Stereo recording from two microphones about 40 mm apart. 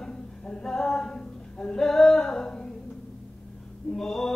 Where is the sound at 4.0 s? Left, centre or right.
Centre.